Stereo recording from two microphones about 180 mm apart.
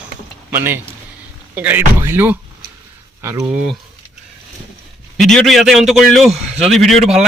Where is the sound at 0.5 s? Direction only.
10° right (ahead or behind).